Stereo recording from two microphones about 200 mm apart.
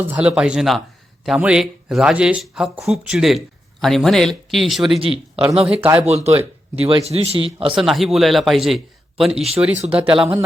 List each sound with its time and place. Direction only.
0.1 s speech: 5° right (ahead or behind)
4.9 s a man's voice: 25° right (ahead or behind)
5.8 s speech: 10° right (ahead or behind)
6.1 s a man's voice: 30° right (ahead or behind)
7.8 s speech: centre (ahead or behind)
9.8 s a man's voice: 25° right (ahead or behind)